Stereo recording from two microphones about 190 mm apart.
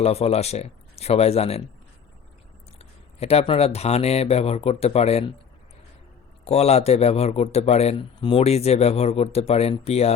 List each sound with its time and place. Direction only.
0.0 s a man's voice: 30° left (ahead or behind)
2.7 s a man's voice: 35° left (ahead or behind)
6.4 s a man's voice: 35° left (ahead or behind)